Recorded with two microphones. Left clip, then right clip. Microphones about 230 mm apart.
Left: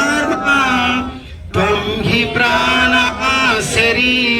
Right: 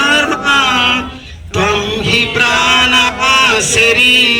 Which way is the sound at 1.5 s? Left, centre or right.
Centre.